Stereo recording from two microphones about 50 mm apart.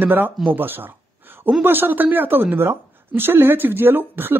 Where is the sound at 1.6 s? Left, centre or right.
Right.